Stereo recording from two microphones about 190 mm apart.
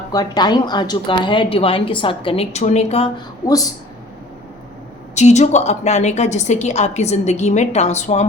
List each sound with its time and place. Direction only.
0.1 s a woman's voice: 20° left (ahead or behind)
3.4 s a woman's voice: 20° left (ahead or behind)
5.1 s a woman's voice: 35° left (ahead or behind)